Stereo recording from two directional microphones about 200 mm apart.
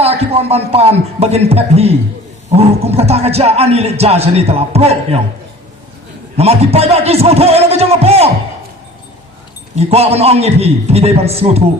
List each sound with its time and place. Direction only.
0.0 s speech: 30° right (ahead or behind)
6.3 s speech: 30° right (ahead or behind)
9.7 s speech: 30° right (ahead or behind)